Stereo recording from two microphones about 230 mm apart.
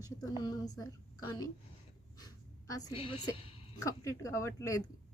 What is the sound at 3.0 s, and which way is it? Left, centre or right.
A woman's voice, left.